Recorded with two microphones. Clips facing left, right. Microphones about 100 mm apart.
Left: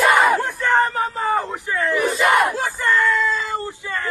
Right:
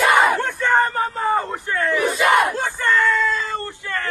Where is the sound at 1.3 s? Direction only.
Centre (ahead or behind).